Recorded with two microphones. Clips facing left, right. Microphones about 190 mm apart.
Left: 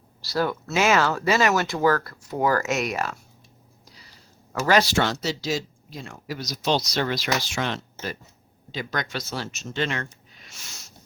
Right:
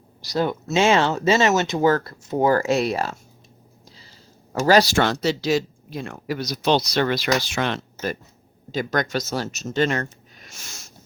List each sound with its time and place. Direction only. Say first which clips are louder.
0.2 s speech: right 2 dB; 20° right (ahead or behind)
4.5 s speech: right 4 dB; 35° right (ahead or behind)
4.9 s speech: right 4 dB; 60° right (ahead or behind)
8.7 s speech: right 7 dB; 45° right (ahead or behind)